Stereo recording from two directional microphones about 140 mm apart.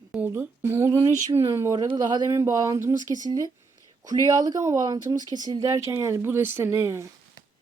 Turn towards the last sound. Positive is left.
turn(degrees=-20)  # may be behind; listen again after turning